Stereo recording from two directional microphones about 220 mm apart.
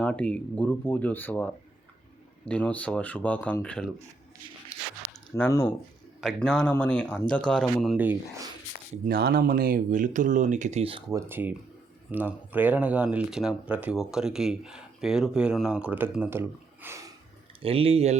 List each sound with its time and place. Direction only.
0.0 s speech: 5° left (ahead or behind)
2.5 s speech: 5° left (ahead or behind)
5.3 s speech: 10° left (ahead or behind); by 8.4 s 5° right (ahead or behind)
9.0 s speech: 45° right (ahead or behind); by 11.2 s 25° right (ahead or behind)
11.3 s speech: 10° right (ahead or behind)
17.6 s speech: 25° right (ahead or behind)